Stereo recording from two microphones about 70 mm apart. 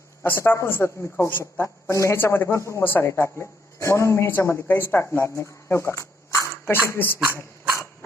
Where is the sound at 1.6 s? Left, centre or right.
Left.